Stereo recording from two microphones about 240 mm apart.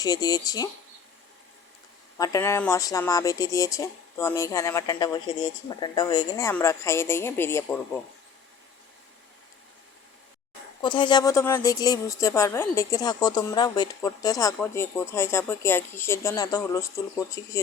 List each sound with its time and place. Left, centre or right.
0.0 s speech: centre
2.1 s speech: centre
10.8 s speech: centre